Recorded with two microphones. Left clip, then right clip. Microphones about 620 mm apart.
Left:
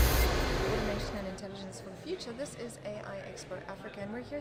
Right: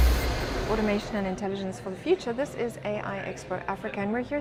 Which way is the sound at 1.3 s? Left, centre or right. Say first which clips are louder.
Right 11 dB; right.